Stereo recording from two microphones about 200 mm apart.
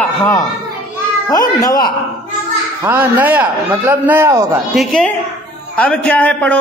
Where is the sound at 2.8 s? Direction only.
10° right (ahead or behind).